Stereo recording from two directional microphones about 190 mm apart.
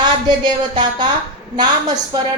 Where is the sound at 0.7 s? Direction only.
25° right (ahead or behind).